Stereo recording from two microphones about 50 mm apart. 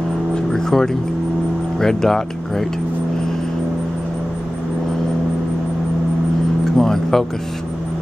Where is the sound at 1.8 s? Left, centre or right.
Centre.